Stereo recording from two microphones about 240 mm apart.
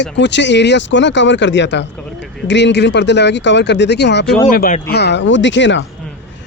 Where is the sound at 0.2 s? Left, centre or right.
Left.